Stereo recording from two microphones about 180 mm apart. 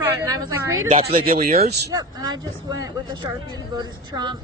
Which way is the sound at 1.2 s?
55° right (ahead or behind).